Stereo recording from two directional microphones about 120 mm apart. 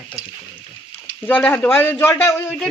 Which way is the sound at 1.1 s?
15° left (ahead or behind).